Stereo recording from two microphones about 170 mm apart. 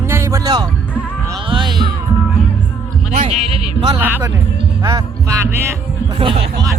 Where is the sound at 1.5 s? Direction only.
25° right (ahead or behind).